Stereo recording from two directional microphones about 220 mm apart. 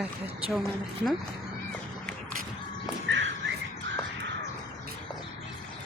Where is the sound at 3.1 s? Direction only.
55° right (ahead or behind).